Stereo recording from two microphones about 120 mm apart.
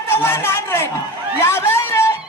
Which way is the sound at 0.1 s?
20° left (ahead or behind).